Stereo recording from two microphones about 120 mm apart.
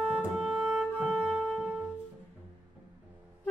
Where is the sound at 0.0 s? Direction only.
10° right (ahead or behind).